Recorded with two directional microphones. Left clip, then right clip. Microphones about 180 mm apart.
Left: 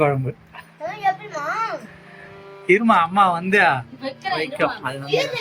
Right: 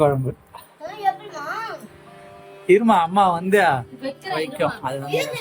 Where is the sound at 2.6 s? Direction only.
10° right (ahead or behind).